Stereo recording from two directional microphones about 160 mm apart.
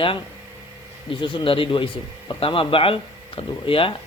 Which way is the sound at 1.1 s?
30° left (ahead or behind).